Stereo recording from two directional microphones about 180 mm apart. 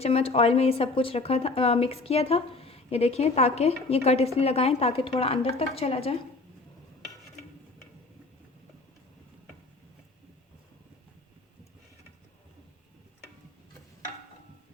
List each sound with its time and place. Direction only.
0.0 s speech: 35° left (ahead or behind)